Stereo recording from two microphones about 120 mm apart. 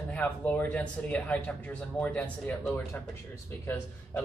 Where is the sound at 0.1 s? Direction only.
15° left (ahead or behind).